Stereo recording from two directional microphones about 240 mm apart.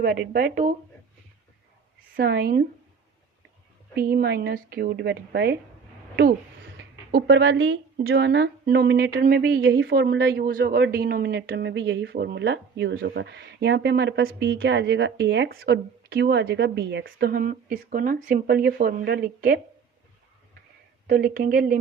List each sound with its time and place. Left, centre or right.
0.0 s a woman's voice: right
2.1 s a woman's voice: right
3.9 s a woman's voice: right
6.7 s speech: right
21.1 s a woman's voice: right